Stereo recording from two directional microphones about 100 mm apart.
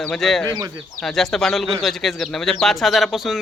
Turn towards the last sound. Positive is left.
turn(degrees=0)  # may be behind; listen again after turning